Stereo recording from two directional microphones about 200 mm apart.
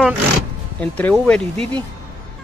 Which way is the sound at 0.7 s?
5° left (ahead or behind).